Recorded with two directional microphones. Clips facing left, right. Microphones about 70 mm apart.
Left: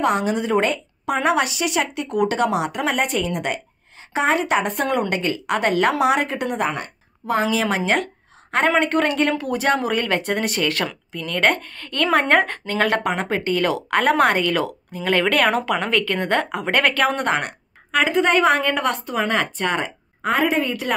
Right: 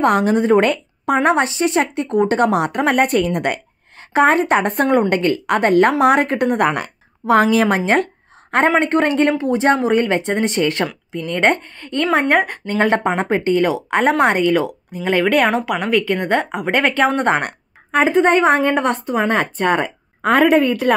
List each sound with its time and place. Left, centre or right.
0.0 s a woman's voice: right
1.1 s a woman's voice: right
17.4 s a woman's voice: right